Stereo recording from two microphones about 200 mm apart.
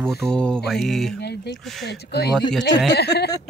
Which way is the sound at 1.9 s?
55° left (ahead or behind).